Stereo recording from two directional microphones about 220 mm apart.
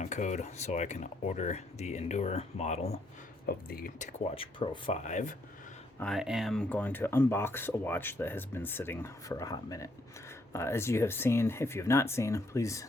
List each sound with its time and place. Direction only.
0.0 s speech: 35° left (ahead or behind)
3.4 s speech: 45° left (ahead or behind)
6.0 s speech: centre (ahead or behind)